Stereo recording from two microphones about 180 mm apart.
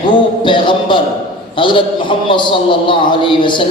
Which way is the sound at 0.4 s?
25° left (ahead or behind).